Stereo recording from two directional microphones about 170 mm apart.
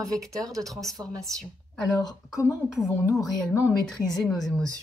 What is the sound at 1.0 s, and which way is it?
Speech, 20° right (ahead or behind).